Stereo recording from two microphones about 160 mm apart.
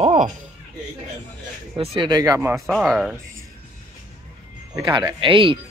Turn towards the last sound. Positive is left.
turn(degrees=-30)  # may be behind; listen again after turning